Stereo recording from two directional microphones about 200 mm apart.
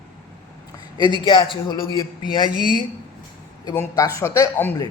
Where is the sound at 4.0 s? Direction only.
15° left (ahead or behind).